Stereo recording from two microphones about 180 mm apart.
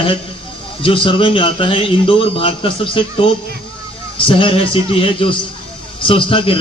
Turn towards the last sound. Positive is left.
turn(degrees=30)  # may be behind; listen again after turning